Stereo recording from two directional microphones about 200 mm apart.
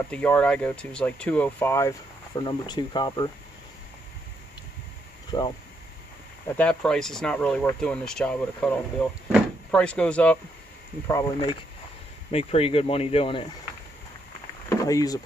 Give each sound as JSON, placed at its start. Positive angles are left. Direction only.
{"t": 0.1, "sound": "speech", "side_deg": 5}
{"t": 5.3, "sound": "speech", "side_deg": 20}
{"t": 6.5, "sound": "speech", "side_deg": 5}
{"t": 11.1, "sound": "speech", "side_deg": 20}
{"t": 12.3, "sound": "speech", "side_deg": 30}
{"t": 14.7, "sound": "speech", "side_deg": 15}